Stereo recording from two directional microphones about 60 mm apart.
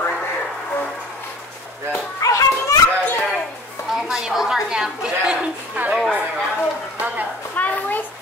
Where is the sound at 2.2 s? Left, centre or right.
Left.